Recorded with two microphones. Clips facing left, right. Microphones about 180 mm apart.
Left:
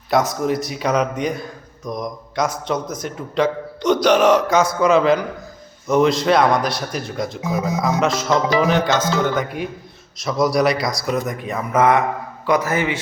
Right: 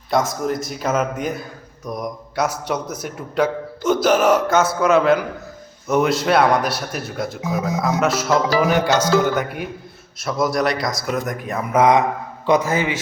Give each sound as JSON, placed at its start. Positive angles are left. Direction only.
{"t": 0.1, "sound": "a man's voice", "side_deg": 0}
{"t": 11.7, "sound": "speech", "side_deg": -15}